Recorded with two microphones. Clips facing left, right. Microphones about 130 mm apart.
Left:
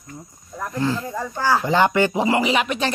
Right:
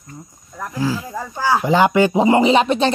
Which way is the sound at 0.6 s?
5° right (ahead or behind).